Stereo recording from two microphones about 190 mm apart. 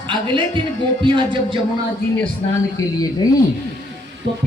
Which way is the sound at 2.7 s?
20° left (ahead or behind).